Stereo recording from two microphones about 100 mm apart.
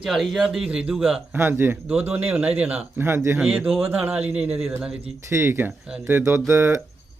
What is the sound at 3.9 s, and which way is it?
Speech, 15° right (ahead or behind).